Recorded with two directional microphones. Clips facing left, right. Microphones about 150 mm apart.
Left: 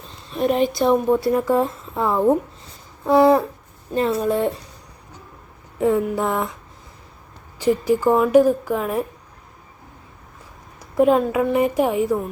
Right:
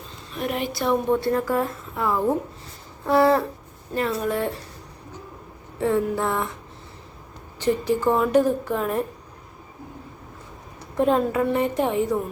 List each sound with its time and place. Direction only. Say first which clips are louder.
0.3 s a woman's voice: left 8 dB; 30° left (ahead or behind)
5.8 s a woman's voice: left 3 dB; 15° left (ahead or behind)
7.6 s a woman's voice: left 3 dB; 10° left (ahead or behind)
10.8 s a woman's voice: left 4 dB; 10° left (ahead or behind)